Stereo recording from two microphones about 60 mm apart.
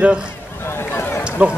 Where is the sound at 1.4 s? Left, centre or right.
Right.